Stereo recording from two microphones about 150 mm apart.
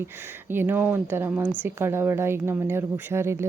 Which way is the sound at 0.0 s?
15° right (ahead or behind).